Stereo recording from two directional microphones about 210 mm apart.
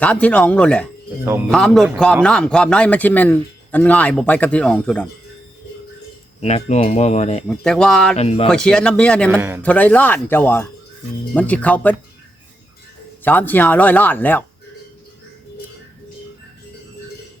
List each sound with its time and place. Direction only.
0.0 s a man's voice: 5° left (ahead or behind)
6.4 s speech: 30° left (ahead or behind)
7.4 s speech: centre (ahead or behind)
8.1 s speech: 30° left (ahead or behind)
8.4 s speech: 5° left (ahead or behind)
9.3 s a man's voice: 10° right (ahead or behind)
9.6 s a man's voice: 5° left (ahead or behind)
13.2 s a man's voice: 10° left (ahead or behind)